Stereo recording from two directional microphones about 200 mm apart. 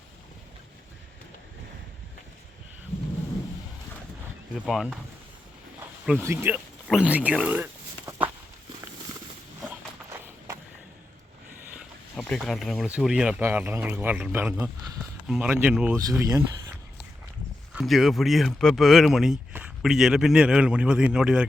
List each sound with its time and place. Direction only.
4.6 s speech: centre (ahead or behind)
6.1 s speech: 10° right (ahead or behind)
10.1 s run: 15° right (ahead or behind)
12.1 s speech: centre (ahead or behind)
16.0 s speech: 15° right (ahead or behind)
17.7 s speech: centre (ahead or behind)